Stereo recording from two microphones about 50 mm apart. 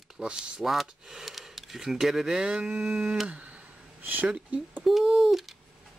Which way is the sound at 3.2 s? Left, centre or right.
Right.